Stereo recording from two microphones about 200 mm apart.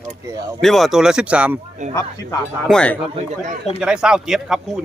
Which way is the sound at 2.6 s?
5° left (ahead or behind).